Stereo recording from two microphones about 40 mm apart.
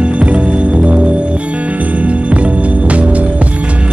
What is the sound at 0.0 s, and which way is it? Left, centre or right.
Music, right.